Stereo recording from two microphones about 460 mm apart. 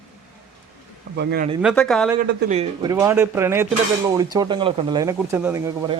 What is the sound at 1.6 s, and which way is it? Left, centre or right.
Speech, centre.